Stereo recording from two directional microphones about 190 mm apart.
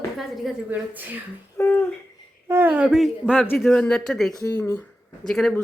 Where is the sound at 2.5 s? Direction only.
10° right (ahead or behind).